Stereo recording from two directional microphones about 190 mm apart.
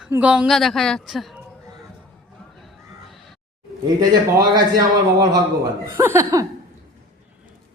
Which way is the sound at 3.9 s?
20° right (ahead or behind).